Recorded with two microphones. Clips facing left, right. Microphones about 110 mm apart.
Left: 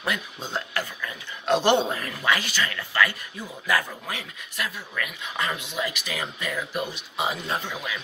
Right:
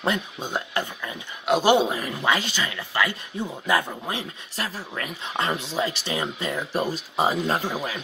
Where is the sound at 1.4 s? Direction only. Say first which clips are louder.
Right 2 dB; 5° right (ahead or behind).